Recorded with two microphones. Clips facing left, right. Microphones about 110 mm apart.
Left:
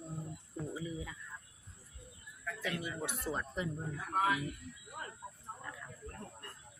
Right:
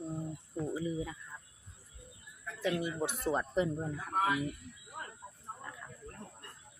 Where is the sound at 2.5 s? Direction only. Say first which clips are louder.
Right 5 dB; 20° right (ahead or behind).